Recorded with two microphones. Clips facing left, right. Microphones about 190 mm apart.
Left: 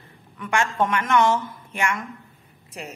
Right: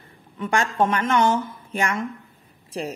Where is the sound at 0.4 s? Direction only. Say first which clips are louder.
Right 2 dB; 30° right (ahead or behind).